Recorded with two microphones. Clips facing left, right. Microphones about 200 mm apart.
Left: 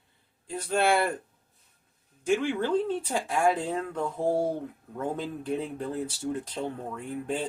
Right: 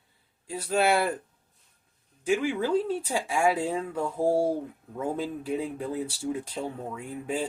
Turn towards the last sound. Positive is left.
turn(degrees=-5)  # may be behind; listen again after turning